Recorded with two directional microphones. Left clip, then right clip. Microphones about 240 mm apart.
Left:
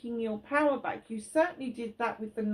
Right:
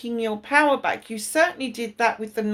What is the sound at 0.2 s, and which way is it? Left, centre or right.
Speech, right.